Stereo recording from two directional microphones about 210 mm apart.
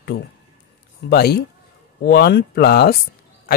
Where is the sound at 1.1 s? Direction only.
50° left (ahead or behind).